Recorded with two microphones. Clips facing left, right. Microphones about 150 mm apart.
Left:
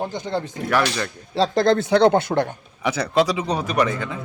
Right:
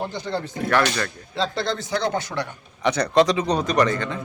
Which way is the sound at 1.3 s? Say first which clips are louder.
Left 7 dB; 35° left (ahead or behind).